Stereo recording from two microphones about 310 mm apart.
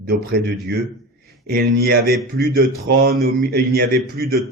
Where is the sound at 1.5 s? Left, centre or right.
Right.